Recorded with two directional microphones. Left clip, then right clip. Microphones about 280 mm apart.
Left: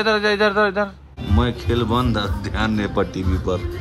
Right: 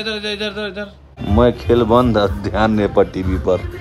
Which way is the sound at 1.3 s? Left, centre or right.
Centre.